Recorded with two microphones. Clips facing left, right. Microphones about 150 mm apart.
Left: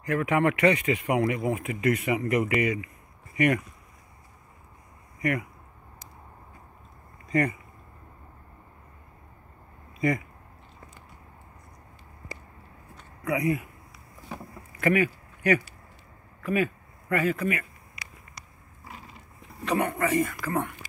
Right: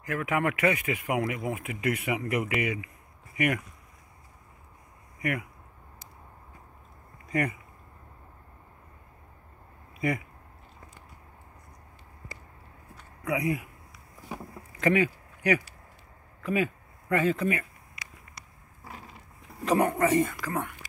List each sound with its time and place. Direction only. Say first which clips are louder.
0.0 s speech: left 4 dB; 5° right (ahead or behind)
7.2 s speech: left 4 dB; 10° right (ahead or behind)
9.9 s speech: left 3 dB; 10° right (ahead or behind)
12.9 s a sound: left 2 dB; 10° right (ahead or behind)
14.3 s vehicle: even; 20° right (ahead or behind)
16.4 s speech: left 1 dB; 15° right (ahead or behind)
19.6 s a man's voice: right 2 dB; 40° right (ahead or behind)
19.9 s a man's voice: right 2 dB; 25° right (ahead or behind)